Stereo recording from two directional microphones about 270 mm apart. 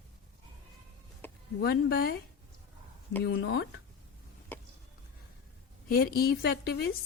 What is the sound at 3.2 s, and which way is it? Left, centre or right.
Speech, left.